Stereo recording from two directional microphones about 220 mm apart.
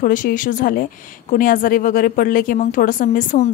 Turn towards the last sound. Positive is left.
turn(degrees=35)  # may be behind; listen again after turning